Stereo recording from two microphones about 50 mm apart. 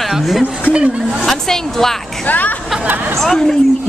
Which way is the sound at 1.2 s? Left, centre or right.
Centre.